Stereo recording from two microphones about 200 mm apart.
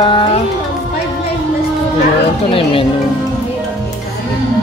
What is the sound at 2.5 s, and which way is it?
Music, 25° left (ahead or behind).